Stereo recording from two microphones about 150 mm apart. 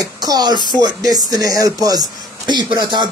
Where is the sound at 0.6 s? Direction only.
30° left (ahead or behind).